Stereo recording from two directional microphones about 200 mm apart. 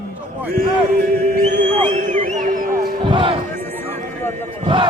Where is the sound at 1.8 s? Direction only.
35° right (ahead or behind).